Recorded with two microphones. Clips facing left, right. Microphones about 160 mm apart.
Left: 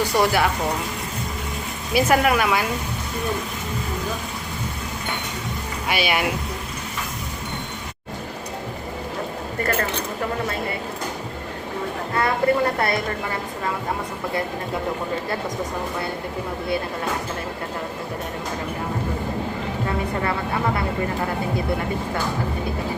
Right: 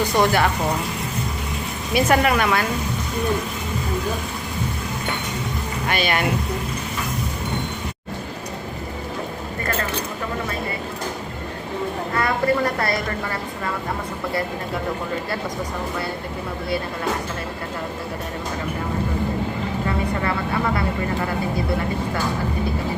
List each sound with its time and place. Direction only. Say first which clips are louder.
0.2 s speech: right 1 dB; 5° left (ahead or behind)
1.9 s speech: even; 5° left (ahead or behind)
5.9 s speech: even; 10° left (ahead or behind)
12.1 s a woman's voice: left 1 dB; 25° left (ahead or behind)